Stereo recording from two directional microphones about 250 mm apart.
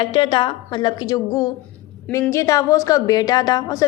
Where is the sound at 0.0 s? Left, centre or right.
Centre.